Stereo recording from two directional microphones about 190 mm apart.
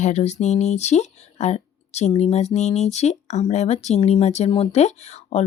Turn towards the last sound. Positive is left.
turn(degrees=35)  # may be behind; listen again after turning